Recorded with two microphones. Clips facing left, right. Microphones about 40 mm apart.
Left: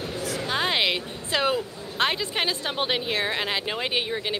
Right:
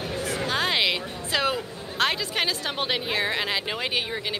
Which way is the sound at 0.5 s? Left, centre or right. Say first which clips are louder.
Even; centre.